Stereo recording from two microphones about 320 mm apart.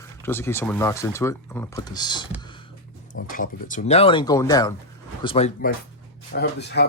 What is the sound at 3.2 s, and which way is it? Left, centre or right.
Speech, left.